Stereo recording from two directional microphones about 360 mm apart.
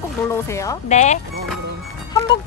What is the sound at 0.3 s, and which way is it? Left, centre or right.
Speech, centre.